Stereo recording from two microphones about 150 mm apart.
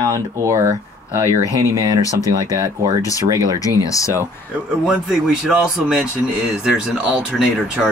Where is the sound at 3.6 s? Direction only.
20° left (ahead or behind).